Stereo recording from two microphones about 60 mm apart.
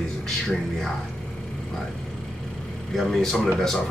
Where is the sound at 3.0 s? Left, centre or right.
Centre.